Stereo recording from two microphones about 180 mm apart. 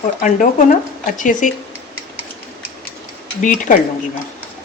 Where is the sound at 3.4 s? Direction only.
45° left (ahead or behind).